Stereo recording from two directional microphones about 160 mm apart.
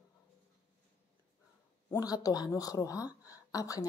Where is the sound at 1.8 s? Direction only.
25° left (ahead or behind).